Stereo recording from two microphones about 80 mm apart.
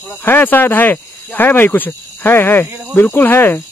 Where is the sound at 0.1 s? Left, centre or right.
Left.